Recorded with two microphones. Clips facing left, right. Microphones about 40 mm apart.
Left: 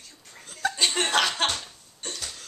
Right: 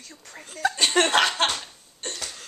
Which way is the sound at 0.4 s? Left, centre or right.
Centre.